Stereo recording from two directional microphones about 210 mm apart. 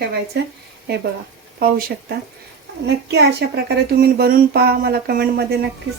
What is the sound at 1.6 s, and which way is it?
A woman's voice, 45° right (ahead or behind).